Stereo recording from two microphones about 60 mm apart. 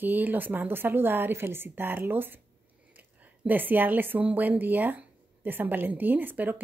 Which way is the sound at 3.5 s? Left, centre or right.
Right.